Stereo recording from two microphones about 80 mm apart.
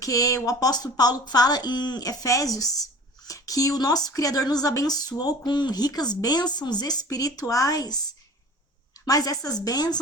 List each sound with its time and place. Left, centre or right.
0.0 s speech: left
5.5 s speech: left
9.0 s speech: left